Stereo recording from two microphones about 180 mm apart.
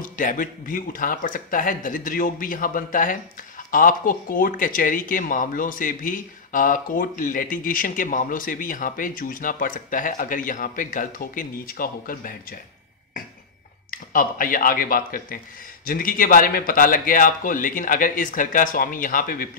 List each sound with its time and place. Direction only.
0.0 s speech: 50° left (ahead or behind)
13.8 s speech: 50° left (ahead or behind)